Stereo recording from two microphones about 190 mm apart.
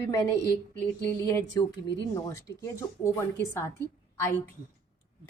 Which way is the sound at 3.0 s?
15° left (ahead or behind).